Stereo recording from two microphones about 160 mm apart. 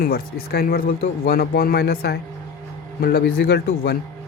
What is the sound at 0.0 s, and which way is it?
Speech, 70° left (ahead or behind).